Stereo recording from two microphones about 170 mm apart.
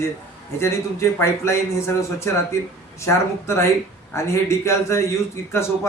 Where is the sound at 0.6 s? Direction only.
15° left (ahead or behind).